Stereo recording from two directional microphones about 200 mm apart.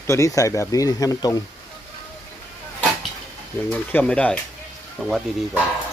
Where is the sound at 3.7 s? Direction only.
10° left (ahead or behind).